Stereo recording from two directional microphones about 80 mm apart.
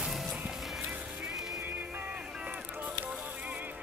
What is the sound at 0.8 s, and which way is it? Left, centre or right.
Music, centre.